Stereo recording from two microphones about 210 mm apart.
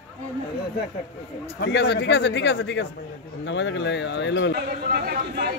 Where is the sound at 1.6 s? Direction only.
55° left (ahead or behind).